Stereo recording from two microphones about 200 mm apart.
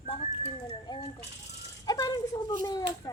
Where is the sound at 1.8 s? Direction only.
20° left (ahead or behind).